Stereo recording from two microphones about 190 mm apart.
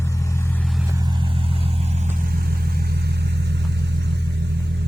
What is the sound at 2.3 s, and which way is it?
Vehicle, 55° right (ahead or behind).